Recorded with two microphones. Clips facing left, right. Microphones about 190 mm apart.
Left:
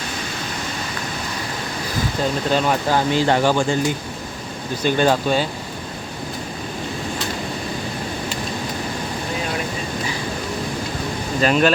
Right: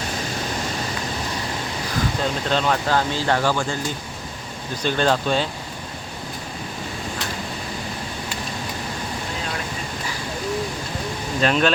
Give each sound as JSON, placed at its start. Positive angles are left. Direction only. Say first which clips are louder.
{"t": 2.5, "sound": "speech", "louder": "left 1 dB", "side_deg": 10}
{"t": 4.8, "sound": "speech", "louder": "left 3 dB", "side_deg": 10}
{"t": 11.3, "sound": "speech", "louder": "left 3 dB", "side_deg": 5}